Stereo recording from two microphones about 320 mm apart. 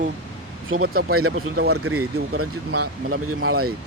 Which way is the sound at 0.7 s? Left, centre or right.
Right.